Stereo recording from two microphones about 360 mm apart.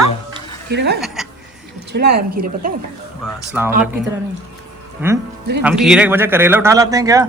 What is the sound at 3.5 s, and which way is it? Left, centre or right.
Speech, centre.